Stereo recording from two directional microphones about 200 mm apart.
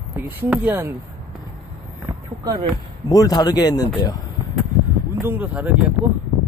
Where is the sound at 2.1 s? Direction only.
20° right (ahead or behind).